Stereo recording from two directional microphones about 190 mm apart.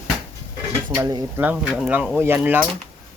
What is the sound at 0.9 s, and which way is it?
Speech, 20° right (ahead or behind).